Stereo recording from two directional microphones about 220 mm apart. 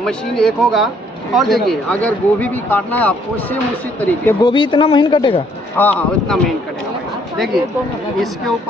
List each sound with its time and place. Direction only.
0.0 s speech: centre (ahead or behind)
4.5 s a woman's voice: 20° left (ahead or behind)
5.8 s speech: 5° left (ahead or behind)